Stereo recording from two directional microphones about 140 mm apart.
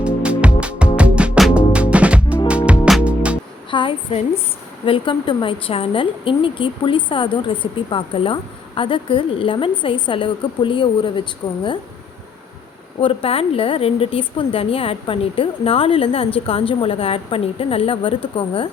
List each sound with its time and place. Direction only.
0.0 s music: 10° right (ahead or behind)
3.7 s a sound: 35° left (ahead or behind)
4.9 s a woman's voice: 35° left (ahead or behind)
13.0 s a woman's voice: 40° left (ahead or behind)